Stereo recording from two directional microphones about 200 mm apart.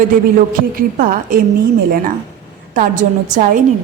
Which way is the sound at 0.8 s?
45° right (ahead or behind).